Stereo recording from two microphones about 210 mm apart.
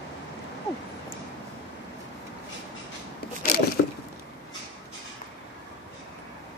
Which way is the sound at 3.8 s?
55° left (ahead or behind).